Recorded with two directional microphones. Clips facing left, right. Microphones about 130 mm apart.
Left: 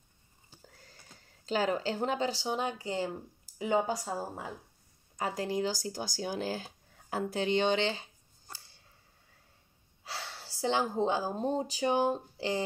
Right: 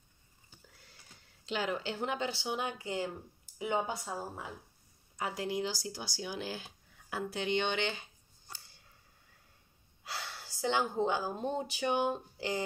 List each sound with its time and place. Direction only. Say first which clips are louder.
0.8 s speech: left 3 dB; 40° left (ahead or behind)
10.0 s speech: left 1 dB; 30° left (ahead or behind)